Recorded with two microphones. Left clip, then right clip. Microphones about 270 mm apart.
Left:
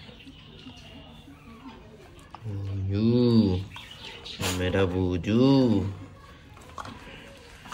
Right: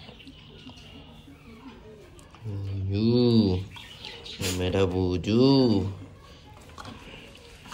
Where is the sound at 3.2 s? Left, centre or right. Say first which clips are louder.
Right 1 dB; centre.